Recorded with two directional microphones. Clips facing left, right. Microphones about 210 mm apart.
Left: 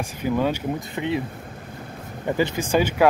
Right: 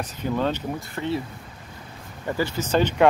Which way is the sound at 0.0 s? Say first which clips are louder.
Left 2 dB; 10° left (ahead or behind).